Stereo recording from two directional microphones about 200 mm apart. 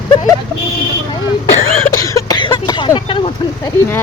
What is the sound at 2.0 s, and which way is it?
Cough, 15° left (ahead or behind).